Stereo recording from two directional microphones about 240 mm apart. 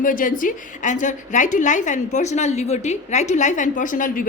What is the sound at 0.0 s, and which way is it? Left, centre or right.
A woman's voice, left.